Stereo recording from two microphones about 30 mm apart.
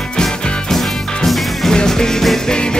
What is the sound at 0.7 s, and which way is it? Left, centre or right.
Music, centre.